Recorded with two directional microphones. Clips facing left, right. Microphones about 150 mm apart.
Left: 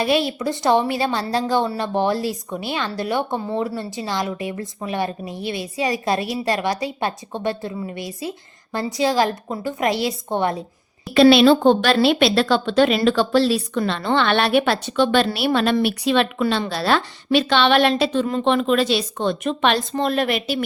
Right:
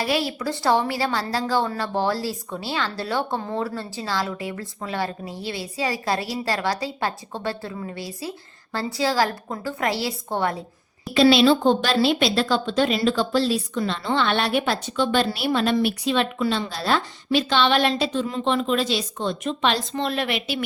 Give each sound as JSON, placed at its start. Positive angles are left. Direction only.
{"t": 0.0, "sound": "a woman's voice", "side_deg": 20}
{"t": 11.1, "sound": "speech", "side_deg": 60}